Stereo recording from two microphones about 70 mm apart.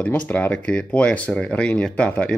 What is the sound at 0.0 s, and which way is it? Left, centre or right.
Speech, left.